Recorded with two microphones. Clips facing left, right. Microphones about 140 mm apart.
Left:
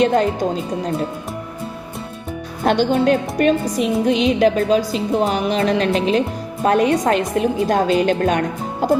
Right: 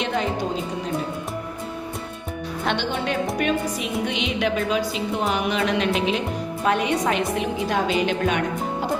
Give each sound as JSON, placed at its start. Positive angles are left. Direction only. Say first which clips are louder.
{"t": 0.0, "sound": "a woman's voice", "louder": "left 9 dB", "side_deg": 45}
{"t": 2.6, "sound": "a woman's voice", "louder": "left 10 dB", "side_deg": 40}